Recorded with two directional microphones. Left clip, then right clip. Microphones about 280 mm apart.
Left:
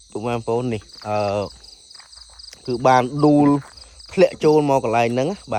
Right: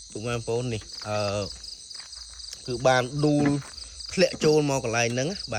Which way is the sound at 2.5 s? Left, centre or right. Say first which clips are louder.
Left 7 dB; left.